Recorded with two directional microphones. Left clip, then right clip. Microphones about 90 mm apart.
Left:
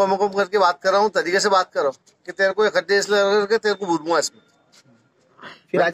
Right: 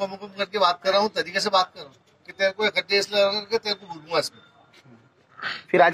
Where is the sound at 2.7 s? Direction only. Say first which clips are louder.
Left 4 dB; 20° left (ahead or behind).